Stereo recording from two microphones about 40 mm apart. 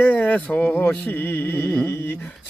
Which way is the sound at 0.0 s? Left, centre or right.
Left.